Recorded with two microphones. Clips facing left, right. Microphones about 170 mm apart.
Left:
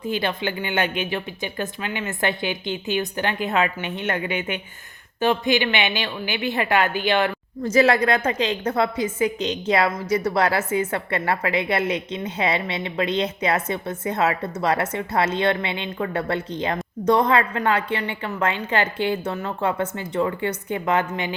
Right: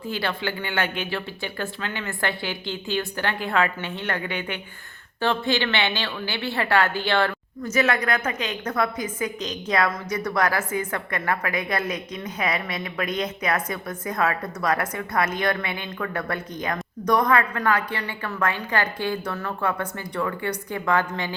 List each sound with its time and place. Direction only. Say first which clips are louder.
0.0 s a woman's voice: left 3 dB; 20° left (ahead or behind)
7.6 s a woman's voice: left 5 dB; 30° left (ahead or behind)